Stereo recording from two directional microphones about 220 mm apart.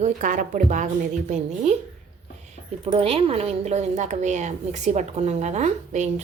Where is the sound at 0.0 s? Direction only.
35° right (ahead or behind).